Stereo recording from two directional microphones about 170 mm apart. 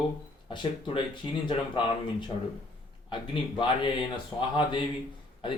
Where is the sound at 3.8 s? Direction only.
30° left (ahead or behind).